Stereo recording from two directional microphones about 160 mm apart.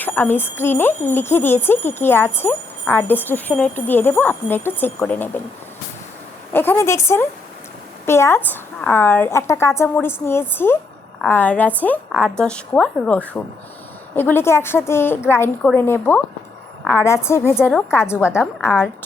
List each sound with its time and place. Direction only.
0.0 s speech: 10° left (ahead or behind)
6.5 s speech: 15° left (ahead or behind)